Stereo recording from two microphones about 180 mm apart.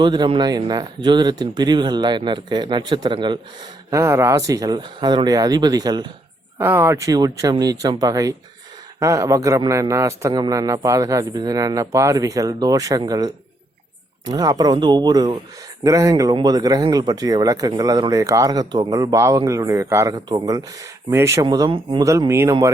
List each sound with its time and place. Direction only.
0.0 s speech: 25° right (ahead or behind)
6.6 s speech: 10° right (ahead or behind)